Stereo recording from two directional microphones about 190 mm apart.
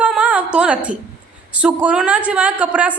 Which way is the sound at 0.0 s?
5° right (ahead or behind).